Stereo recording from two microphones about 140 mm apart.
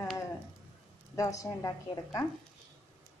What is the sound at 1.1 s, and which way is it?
Speech, 25° left (ahead or behind).